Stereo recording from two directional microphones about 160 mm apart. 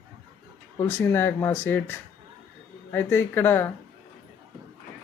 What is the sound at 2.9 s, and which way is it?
Speech, 15° left (ahead or behind).